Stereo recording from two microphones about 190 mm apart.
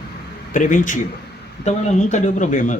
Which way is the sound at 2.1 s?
40° left (ahead or behind).